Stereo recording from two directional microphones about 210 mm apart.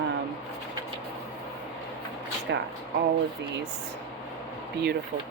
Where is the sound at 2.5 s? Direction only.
55° right (ahead or behind).